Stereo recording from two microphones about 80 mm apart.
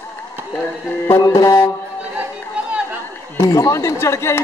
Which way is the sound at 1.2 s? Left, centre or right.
Left.